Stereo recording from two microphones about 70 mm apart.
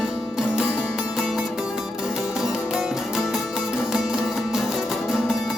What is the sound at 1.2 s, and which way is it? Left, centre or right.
Music, centre.